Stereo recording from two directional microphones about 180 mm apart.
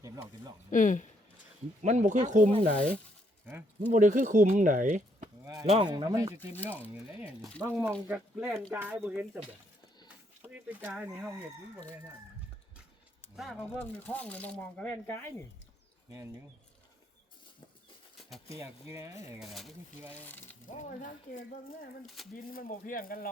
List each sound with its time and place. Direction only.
0.7 s speech: 45° left (ahead or behind)
1.8 s speech: 40° right (ahead or behind)
3.9 s speech: 45° right (ahead or behind)
5.6 s speech: 35° right (ahead or behind)
5.9 s speech: 20° right (ahead or behind)
6.9 s speech: 5° right (ahead or behind)
10.8 s speech: 10° right (ahead or behind)
13.3 s speech: centre (ahead or behind)
13.7 s speech: 10° left (ahead or behind)
18.5 s speech: 15° right (ahead or behind)
19.4 s speech: centre (ahead or behind)
20.7 s speech: 45° left (ahead or behind)